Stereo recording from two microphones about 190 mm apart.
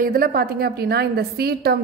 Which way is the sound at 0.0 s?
50° right (ahead or behind).